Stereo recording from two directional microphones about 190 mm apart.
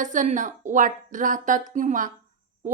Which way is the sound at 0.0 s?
40° right (ahead or behind).